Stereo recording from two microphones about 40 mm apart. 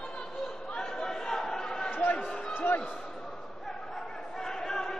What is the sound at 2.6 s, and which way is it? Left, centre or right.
Basketball bounce, left.